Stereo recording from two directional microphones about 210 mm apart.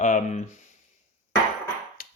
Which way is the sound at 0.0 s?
35° left (ahead or behind).